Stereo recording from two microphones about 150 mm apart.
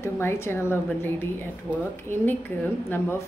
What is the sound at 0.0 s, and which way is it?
Speech, 15° left (ahead or behind).